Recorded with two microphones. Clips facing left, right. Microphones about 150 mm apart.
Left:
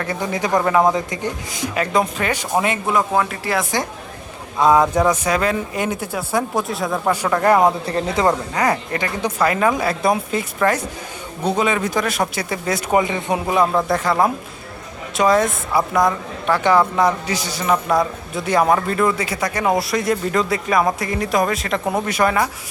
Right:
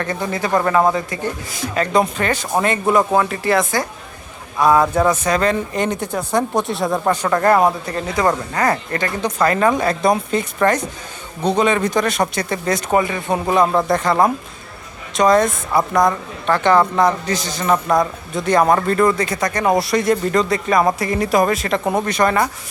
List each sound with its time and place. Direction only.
0.0 s speech: 10° left (ahead or behind)
1.9 s speech: centre (ahead or behind)
4.5 s speech: 20° left (ahead or behind)
7.9 s speech: 30° left (ahead or behind); by 13.0 s 5° left (ahead or behind)
13.0 s speech: 20° left (ahead or behind)
13.3 s speech: 5° left (ahead or behind)